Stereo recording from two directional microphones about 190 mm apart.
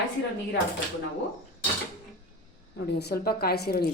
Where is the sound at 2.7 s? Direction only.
60° left (ahead or behind).